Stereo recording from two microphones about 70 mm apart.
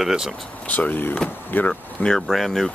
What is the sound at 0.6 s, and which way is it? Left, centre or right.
Speech, left.